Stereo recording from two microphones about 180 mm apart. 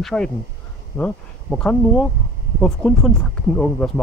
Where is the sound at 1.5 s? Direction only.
5° left (ahead or behind).